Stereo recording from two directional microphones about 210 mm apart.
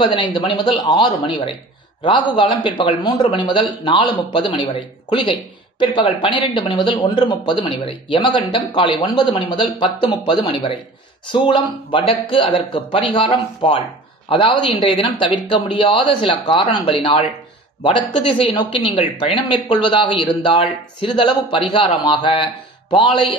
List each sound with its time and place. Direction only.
0.1 s a man's voice: 20° left (ahead or behind)
18.5 s a man's voice: 25° left (ahead or behind)